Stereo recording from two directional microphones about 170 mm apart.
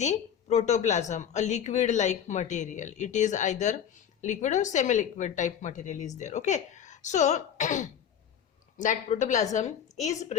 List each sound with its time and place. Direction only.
0.0 s speech: 40° left (ahead or behind)